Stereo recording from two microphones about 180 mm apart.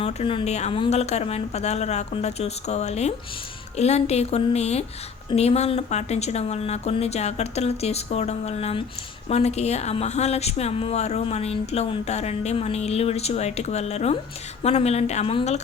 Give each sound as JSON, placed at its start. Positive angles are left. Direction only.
{"t": 0.0, "sound": "speech", "side_deg": 30}